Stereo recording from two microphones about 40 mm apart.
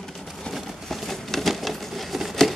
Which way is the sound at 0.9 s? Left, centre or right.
Centre.